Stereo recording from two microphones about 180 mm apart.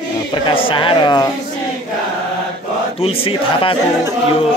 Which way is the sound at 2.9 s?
30° left (ahead or behind).